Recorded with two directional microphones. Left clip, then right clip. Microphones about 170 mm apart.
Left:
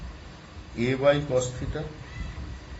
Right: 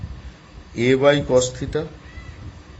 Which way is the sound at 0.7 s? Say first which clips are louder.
Right 7 dB; 75° right (ahead or behind).